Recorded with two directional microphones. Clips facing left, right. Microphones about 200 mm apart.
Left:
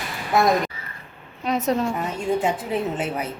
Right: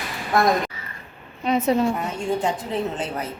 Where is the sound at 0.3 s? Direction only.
5° left (ahead or behind).